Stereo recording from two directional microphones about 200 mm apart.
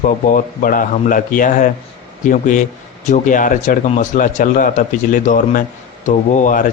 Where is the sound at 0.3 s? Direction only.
40° left (ahead or behind).